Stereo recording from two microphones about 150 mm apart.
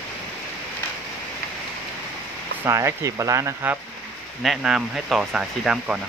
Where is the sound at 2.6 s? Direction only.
20° right (ahead or behind).